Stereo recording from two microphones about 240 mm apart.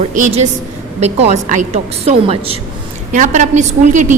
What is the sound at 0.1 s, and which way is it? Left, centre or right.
A woman's voice, right.